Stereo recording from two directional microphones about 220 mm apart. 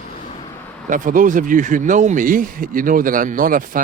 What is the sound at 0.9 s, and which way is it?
Speech, 35° right (ahead or behind).